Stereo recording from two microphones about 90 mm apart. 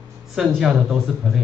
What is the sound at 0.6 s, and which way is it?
Speech, 5° right (ahead or behind).